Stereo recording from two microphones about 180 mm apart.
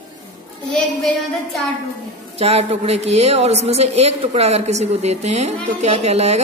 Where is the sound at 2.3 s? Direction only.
35° right (ahead or behind).